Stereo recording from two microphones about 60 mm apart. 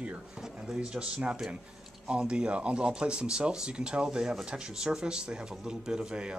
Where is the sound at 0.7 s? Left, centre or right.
Centre.